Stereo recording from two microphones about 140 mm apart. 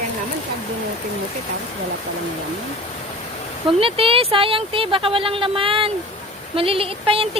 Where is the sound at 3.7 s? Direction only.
40° right (ahead or behind).